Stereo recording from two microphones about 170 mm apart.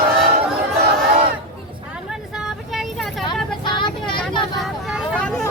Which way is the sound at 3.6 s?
25° left (ahead or behind).